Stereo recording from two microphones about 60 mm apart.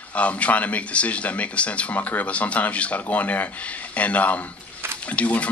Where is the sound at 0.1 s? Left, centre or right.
Left.